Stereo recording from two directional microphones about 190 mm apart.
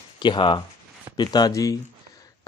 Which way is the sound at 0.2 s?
25° left (ahead or behind).